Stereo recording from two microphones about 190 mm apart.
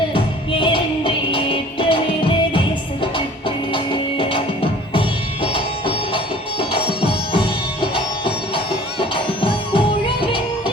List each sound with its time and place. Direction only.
0.1 s music: 30° left (ahead or behind)
4.2 s music: 30° left (ahead or behind)
7.3 s music: 25° left (ahead or behind)